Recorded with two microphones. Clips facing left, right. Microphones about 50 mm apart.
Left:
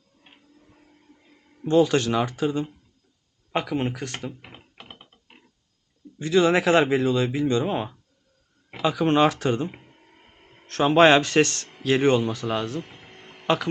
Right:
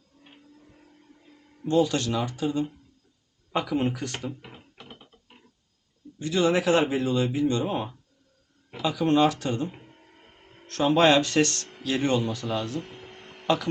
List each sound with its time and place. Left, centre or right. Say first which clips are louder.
1.7 s speech: left 4 dB; left
2.1 s speech: left 3 dB; left
4.4 s typing: left 1 dB; left
6.1 s speech: left 4 dB; left
9.9 s a sound: even; centre
10.8 s speech: left 4 dB; left
11.4 s speech: right 1 dB; left
11.8 s speech: left 5 dB; left
12.2 s speech: left 3 dB; left
12.8 s a sound: right 2 dB; centre